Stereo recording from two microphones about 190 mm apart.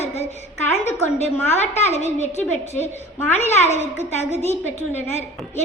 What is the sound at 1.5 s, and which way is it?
A woman's voice, 35° left (ahead or behind).